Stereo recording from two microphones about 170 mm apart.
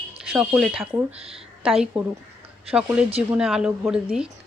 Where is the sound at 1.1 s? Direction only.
35° right (ahead or behind).